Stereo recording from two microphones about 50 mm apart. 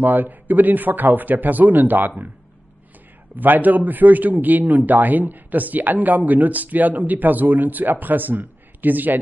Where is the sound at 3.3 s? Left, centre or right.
Right.